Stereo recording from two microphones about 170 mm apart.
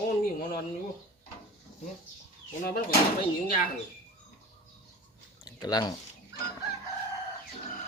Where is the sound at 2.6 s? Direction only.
60° left (ahead or behind).